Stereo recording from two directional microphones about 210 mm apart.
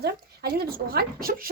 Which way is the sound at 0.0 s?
50° right (ahead or behind).